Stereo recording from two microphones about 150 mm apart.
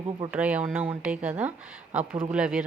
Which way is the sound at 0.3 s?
10° right (ahead or behind).